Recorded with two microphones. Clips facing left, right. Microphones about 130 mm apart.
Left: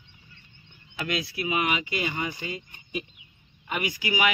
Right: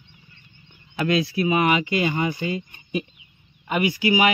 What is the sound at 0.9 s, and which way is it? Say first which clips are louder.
Speech: right 9 dB; 40° right (ahead or behind).